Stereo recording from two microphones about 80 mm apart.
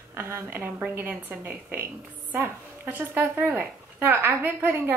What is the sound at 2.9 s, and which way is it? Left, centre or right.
A woman's voice, right.